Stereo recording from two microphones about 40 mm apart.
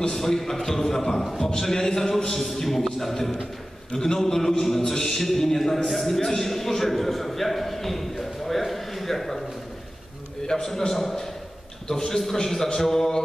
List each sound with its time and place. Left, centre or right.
0.1 s a man's voice: centre
10.4 s a man's voice: centre